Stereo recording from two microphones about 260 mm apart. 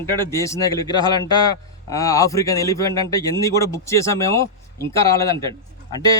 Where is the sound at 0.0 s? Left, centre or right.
Centre.